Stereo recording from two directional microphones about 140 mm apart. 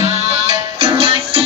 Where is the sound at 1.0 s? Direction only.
45° right (ahead or behind).